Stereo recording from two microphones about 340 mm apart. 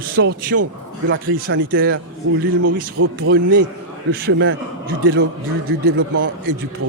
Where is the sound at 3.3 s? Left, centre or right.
Right.